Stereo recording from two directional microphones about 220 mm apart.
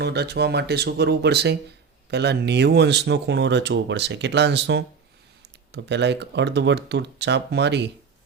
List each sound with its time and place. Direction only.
0.0 s speech: 50° right (ahead or behind)